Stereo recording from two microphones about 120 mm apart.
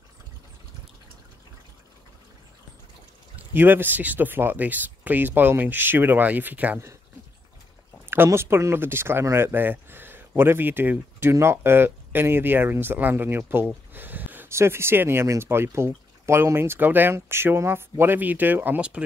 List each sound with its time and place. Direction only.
3.3 s speech: 15° right (ahead or behind)
8.1 s speech: 20° right (ahead or behind)